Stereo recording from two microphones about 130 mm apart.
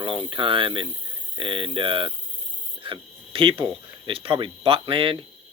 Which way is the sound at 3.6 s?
40° right (ahead or behind).